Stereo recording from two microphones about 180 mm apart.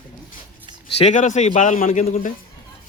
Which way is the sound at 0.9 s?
40° left (ahead or behind).